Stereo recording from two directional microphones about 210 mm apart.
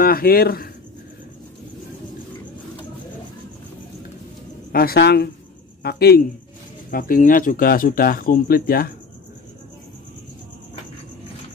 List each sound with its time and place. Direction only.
0.0 s speech: 45° left (ahead or behind)
4.7 s speech: 50° left (ahead or behind)